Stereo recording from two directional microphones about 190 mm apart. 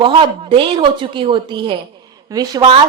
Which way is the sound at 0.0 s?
25° right (ahead or behind).